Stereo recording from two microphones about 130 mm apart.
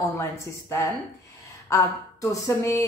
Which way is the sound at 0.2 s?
20° left (ahead or behind).